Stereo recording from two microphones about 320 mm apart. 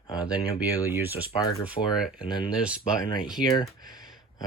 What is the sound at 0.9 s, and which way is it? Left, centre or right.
Speech, centre.